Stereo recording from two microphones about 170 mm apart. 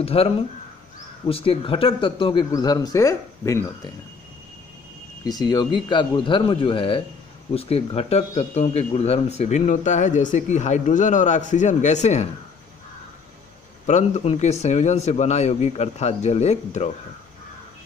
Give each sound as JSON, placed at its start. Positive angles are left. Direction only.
{"t": 0.0, "sound": "a man's voice", "side_deg": 35}
{"t": 5.2, "sound": "speech", "side_deg": 25}
{"t": 13.8, "sound": "a man's voice", "side_deg": 45}